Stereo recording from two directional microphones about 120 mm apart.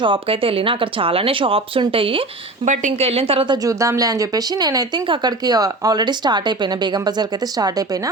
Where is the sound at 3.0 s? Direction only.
55° right (ahead or behind).